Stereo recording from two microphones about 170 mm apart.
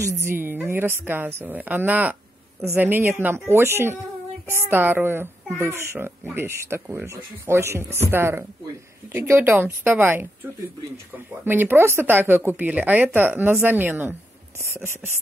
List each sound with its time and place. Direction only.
0.0 s speech: 15° right (ahead or behind)
11.4 s speech: 10° right (ahead or behind)